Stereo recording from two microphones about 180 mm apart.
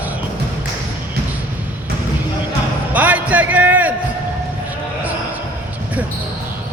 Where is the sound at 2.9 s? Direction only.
10° right (ahead or behind).